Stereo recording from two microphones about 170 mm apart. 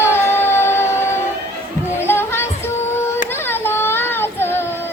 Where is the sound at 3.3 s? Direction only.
15° left (ahead or behind).